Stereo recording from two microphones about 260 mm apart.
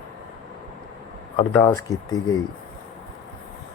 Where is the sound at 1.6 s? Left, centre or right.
Centre.